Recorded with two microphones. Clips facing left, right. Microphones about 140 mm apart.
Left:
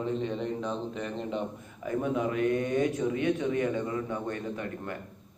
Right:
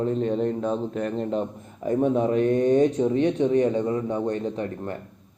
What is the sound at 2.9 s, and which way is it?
Speech, 30° right (ahead or behind).